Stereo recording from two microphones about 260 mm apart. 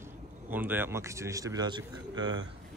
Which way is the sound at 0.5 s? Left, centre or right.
Centre.